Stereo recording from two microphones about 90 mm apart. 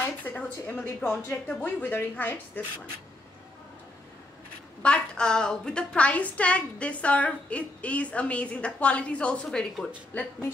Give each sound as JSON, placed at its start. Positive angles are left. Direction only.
{"t": 0.2, "sound": "a woman's voice", "side_deg": 20}
{"t": 4.8, "sound": "a woman's voice", "side_deg": 10}
{"t": 10.1, "sound": "speech", "side_deg": 20}